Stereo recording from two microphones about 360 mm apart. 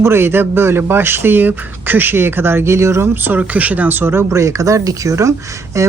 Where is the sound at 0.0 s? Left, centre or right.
Centre.